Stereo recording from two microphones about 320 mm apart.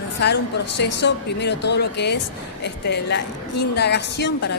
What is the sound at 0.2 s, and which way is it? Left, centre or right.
A woman's voice, left.